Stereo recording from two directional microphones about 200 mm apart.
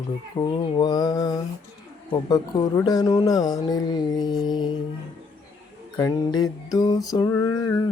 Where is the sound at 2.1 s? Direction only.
20° left (ahead or behind).